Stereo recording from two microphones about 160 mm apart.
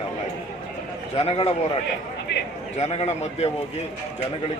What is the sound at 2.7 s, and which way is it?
Speech, 40° left (ahead or behind).